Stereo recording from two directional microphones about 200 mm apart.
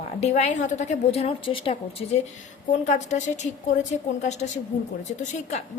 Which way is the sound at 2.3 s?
35° left (ahead or behind).